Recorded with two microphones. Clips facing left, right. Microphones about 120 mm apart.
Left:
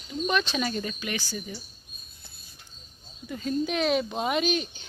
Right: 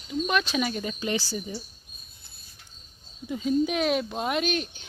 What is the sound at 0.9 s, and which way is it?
Speech, 30° right (ahead or behind).